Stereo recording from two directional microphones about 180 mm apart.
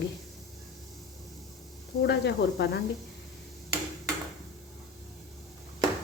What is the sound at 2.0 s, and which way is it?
Speech, 70° left (ahead or behind).